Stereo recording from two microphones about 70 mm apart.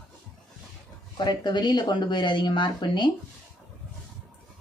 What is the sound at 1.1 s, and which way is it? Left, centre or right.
Speech, left.